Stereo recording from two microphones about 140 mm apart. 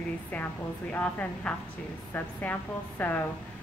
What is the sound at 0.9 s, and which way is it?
A woman's voice, 10° left (ahead or behind).